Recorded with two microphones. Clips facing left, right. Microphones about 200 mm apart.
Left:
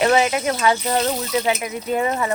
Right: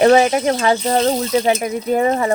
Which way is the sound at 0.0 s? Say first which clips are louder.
Right 6 dB; 35° right (ahead or behind).